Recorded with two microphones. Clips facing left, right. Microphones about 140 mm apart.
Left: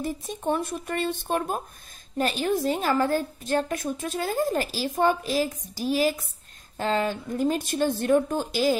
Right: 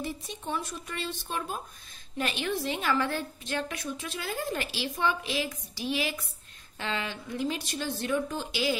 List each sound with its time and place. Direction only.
0.0 s speech: 50° left (ahead or behind)
2.1 s a woman's voice: 40° left (ahead or behind)